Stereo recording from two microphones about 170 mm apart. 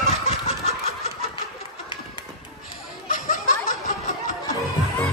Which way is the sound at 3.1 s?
50° left (ahead or behind).